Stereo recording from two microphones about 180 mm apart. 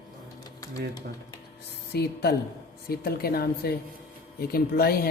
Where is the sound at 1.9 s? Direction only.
65° left (ahead or behind).